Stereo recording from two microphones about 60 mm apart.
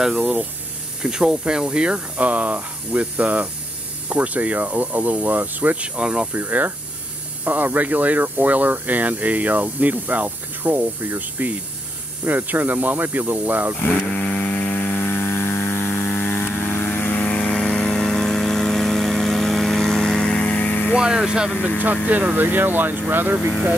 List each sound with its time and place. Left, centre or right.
0.2 s speech: centre
5.9 s speech: centre
6.3 s speech: right
13.7 s speech: left
14.4 s a sound: left
15.3 s vehicle: left
17.4 s vehicle: centre
20.4 s a sound: left
21.5 s speech: centre
22.0 s speech: right